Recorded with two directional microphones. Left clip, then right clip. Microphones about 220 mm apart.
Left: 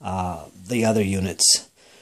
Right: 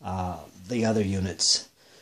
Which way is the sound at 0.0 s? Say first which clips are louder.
Left 5 dB; 30° left (ahead or behind).